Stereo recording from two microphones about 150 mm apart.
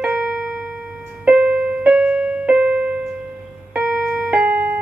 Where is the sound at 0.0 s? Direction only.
5° right (ahead or behind).